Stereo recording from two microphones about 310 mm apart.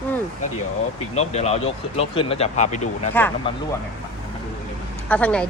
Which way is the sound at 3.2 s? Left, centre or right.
Centre.